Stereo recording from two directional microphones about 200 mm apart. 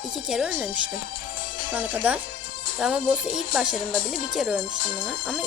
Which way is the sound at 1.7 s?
10° right (ahead or behind).